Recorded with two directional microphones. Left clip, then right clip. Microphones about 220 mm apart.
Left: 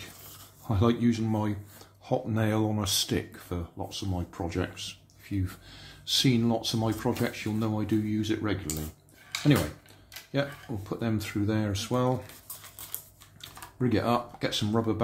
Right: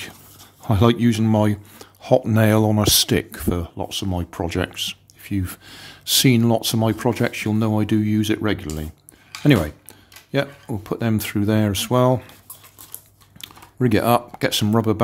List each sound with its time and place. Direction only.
0.7 s speech: 55° right (ahead or behind)
10.3 s speech: 50° right (ahead or behind)
13.4 s speech: 50° right (ahead or behind)